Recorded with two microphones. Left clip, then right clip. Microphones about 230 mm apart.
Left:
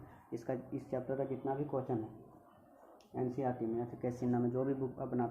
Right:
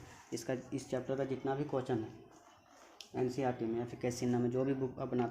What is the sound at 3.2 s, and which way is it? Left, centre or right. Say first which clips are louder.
Speech: right 2 dB; right.